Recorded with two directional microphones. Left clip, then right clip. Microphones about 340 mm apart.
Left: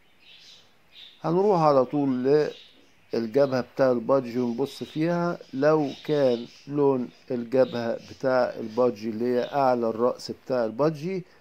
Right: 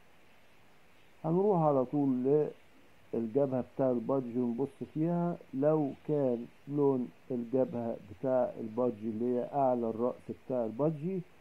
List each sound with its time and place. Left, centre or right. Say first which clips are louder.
1.2 s a man's voice: left 8 dB; left